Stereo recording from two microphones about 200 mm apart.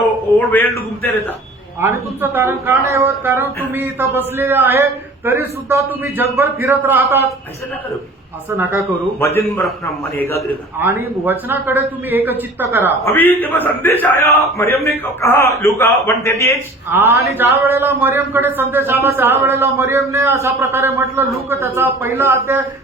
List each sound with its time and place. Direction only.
0.3 s a man's voice: 10° left (ahead or behind)
1.8 s a man's voice: 10° right (ahead or behind)
8.4 s a man's voice: 10° right (ahead or behind)
9.2 s a man's voice: 15° left (ahead or behind)
9.6 s a man's voice: centre (ahead or behind)
10.8 s a man's voice: 10° right (ahead or behind)
13.1 s a man's voice: 10° left (ahead or behind)
16.9 s a man's voice: 10° right (ahead or behind)